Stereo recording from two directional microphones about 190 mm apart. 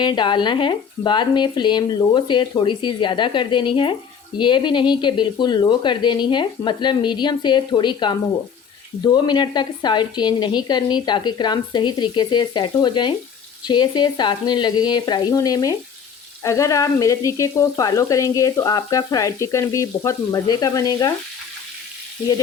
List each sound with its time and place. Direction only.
0.0 s a woman's voice: 25° left (ahead or behind)
16.4 s frying: 15° left (ahead or behind)